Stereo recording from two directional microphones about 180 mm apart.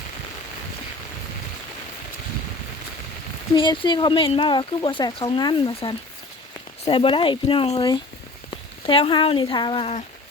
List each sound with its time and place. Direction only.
3.5 s speech: 25° left (ahead or behind)